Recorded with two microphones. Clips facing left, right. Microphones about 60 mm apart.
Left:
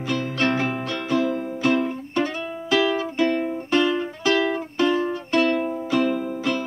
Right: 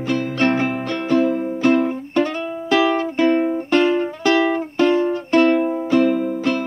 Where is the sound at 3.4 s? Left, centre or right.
Right.